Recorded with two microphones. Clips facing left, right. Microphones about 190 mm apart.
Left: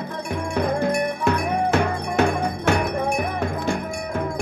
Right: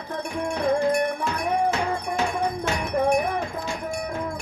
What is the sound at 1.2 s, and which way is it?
Cowbell, 65° left (ahead or behind).